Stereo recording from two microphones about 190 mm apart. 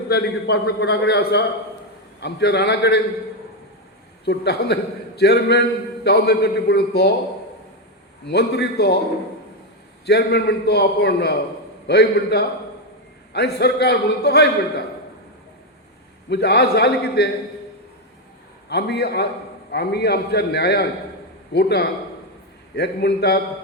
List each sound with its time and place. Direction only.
0.1 s a man's voice: 60° left (ahead or behind)
4.3 s a man's voice: 60° left (ahead or behind)
8.2 s a man's voice: 60° left (ahead or behind)
10.1 s a man's voice: 60° left (ahead or behind)
16.3 s a man's voice: 60° left (ahead or behind)
18.7 s a man's voice: 60° left (ahead or behind)